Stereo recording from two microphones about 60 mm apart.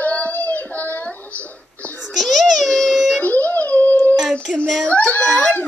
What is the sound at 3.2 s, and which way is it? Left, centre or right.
Dog, left.